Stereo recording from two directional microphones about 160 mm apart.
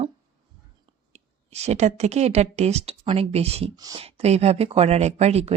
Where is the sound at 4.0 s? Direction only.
40° right (ahead or behind).